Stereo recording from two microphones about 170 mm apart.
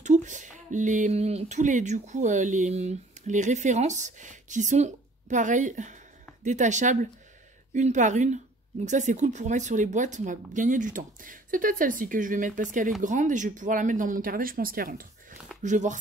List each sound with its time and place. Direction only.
0.0 s speech: 45° right (ahead or behind)